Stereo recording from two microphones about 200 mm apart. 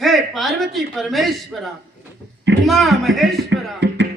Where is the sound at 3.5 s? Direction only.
65° right (ahead or behind).